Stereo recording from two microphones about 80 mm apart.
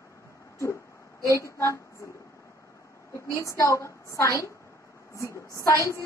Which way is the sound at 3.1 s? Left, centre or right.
Left.